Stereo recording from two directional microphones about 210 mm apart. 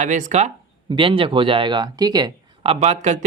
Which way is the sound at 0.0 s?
35° right (ahead or behind).